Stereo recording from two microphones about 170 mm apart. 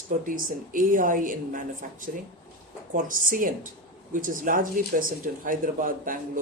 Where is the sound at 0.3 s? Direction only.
55° right (ahead or behind).